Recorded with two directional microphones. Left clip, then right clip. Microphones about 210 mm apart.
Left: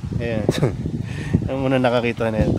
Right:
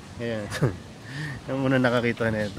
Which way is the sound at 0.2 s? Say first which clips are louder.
Left 7 dB; 20° left (ahead or behind).